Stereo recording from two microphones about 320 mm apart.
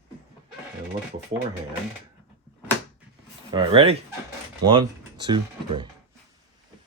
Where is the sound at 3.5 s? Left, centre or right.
Centre.